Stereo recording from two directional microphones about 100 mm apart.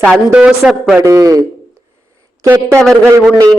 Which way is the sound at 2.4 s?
25° right (ahead or behind).